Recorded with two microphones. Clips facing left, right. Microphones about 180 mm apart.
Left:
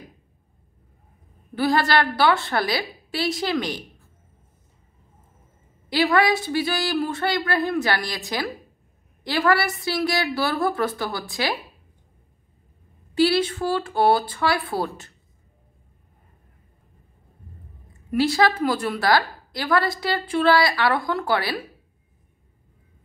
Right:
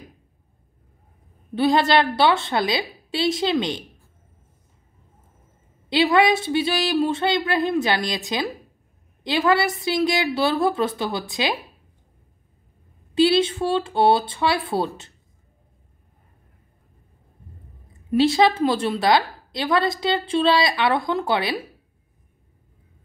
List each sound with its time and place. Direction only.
1.5 s a woman's voice: 20° right (ahead or behind)
5.9 s a woman's voice: 20° right (ahead or behind)
9.2 s a woman's voice: 20° right (ahead or behind)
13.1 s a woman's voice: 20° right (ahead or behind)
18.1 s a woman's voice: 25° right (ahead or behind)